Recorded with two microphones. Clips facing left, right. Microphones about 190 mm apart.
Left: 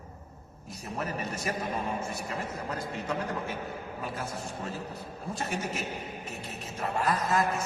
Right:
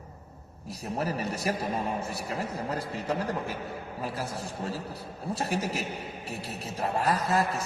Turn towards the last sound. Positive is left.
turn(degrees=-35)  # may be behind; listen again after turning